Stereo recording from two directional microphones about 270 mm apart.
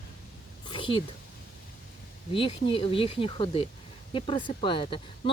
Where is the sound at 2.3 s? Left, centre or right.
Centre.